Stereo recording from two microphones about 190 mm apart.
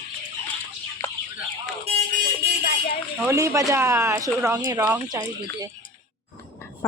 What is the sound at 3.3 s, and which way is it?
Speech, 15° right (ahead or behind).